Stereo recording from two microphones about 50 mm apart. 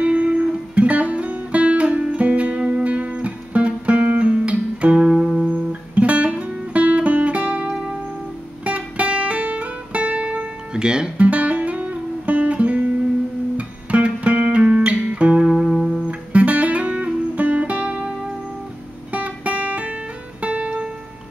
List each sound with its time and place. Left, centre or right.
0.0 s music: right
5.5 s music: right
7.7 s music: centre
8.6 s music: right
11.2 s music: right
15.5 s music: centre
16.1 s music: right
19.1 s music: right